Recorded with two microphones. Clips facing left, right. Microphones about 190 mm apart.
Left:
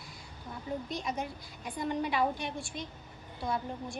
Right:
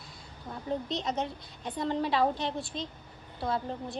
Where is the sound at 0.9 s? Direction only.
25° right (ahead or behind).